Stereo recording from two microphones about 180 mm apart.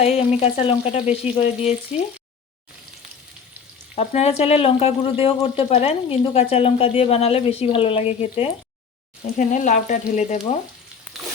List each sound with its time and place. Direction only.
0.0 s speech: 35° left (ahead or behind)
3.9 s speech: 35° left (ahead or behind)
9.2 s frying: 45° left (ahead or behind)
10.2 s speech: 35° left (ahead or behind)